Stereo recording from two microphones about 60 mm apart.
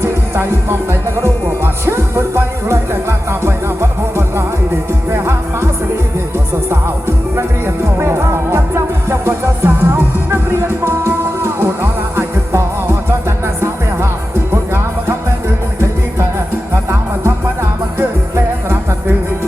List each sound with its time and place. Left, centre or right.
0.0 s music: right
5.1 s music: right
7.9 s music: right
14.5 s music: right